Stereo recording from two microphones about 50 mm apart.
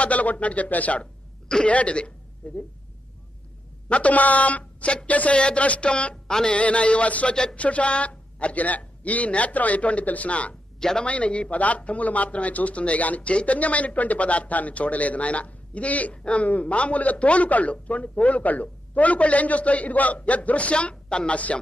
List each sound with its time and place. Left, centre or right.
0.0 s speech: left
3.9 s speech: left
10.8 s speech: centre
11.1 s speech: left